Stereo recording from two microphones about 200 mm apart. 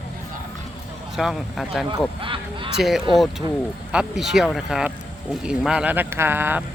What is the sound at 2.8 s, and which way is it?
Speech, centre (ahead or behind).